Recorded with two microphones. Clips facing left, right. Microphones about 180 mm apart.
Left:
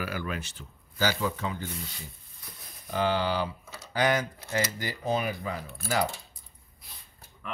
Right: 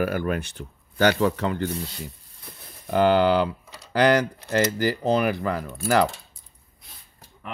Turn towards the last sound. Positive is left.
turn(degrees=-70)  # may be behind; listen again after turning